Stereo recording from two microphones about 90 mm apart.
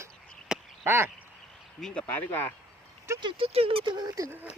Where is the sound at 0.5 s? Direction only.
10° right (ahead or behind).